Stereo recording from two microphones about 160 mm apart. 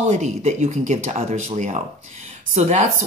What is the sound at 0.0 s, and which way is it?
Speech, 45° right (ahead or behind).